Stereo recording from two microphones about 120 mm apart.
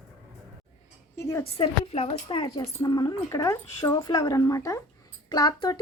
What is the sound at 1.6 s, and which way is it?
Speech, 55° left (ahead or behind).